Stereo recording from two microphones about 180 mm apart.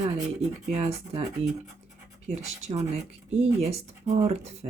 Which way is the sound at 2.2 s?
40° right (ahead or behind).